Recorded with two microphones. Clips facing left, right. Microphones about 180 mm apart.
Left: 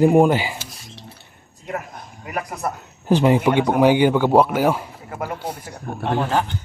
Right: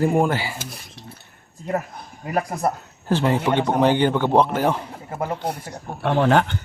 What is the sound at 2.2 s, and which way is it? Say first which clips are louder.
Speech: right 4 dB; 30° right (ahead or behind).